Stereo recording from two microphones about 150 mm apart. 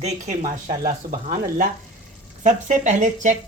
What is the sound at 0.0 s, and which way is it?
Speech, 50° right (ahead or behind).